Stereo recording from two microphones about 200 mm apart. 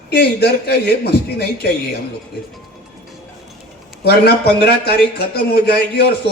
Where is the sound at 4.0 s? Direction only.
50° left (ahead or behind).